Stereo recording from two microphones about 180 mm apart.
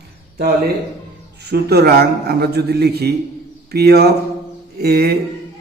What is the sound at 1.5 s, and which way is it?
A man's voice, 60° right (ahead or behind).